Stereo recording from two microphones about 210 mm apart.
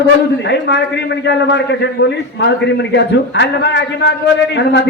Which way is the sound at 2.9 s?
55° left (ahead or behind).